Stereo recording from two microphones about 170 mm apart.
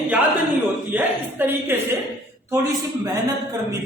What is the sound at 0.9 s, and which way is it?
A woman's voice, 10° right (ahead or behind).